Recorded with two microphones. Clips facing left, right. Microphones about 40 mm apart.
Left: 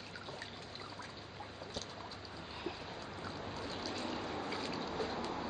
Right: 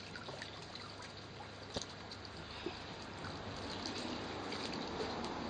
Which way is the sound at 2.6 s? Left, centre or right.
Centre.